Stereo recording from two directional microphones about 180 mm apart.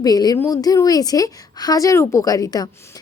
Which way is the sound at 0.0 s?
20° left (ahead or behind).